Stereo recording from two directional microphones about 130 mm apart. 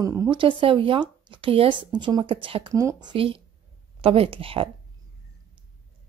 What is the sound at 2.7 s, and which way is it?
Speech, 25° right (ahead or behind).